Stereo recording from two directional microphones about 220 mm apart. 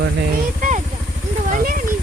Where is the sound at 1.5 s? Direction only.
40° right (ahead or behind).